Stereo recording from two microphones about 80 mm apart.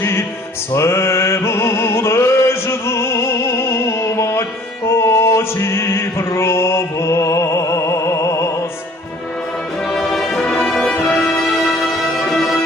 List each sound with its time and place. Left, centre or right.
0.7 s music: left
9.9 s music: centre